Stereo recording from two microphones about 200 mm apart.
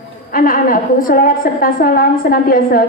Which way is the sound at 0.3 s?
45° left (ahead or behind).